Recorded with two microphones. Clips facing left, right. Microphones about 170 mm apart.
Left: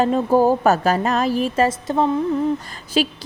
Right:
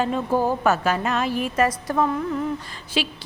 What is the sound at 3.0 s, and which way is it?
Speech, 40° left (ahead or behind).